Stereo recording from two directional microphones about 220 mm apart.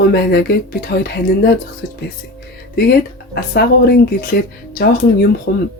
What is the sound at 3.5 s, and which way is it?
Speech, 45° left (ahead or behind).